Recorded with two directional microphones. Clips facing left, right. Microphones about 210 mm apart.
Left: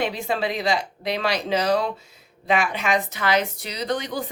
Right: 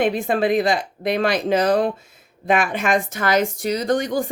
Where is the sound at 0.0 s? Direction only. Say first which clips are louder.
Right 6 dB; 50° right (ahead or behind).